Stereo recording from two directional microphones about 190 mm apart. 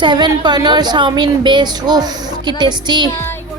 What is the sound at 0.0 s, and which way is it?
A woman's voice, 25° right (ahead or behind).